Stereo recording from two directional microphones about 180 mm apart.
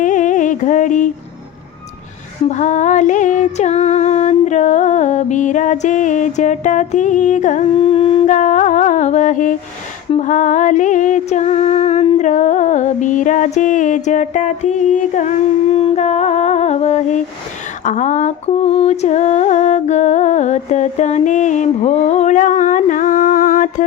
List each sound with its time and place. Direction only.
0.0 s music: 45° left (ahead or behind)
2.5 s music: 40° left (ahead or behind)
7.7 s humming: 30° left (ahead or behind)
8.3 s mantra: 45° left (ahead or behind)
10.1 s a sound: 40° left (ahead or behind)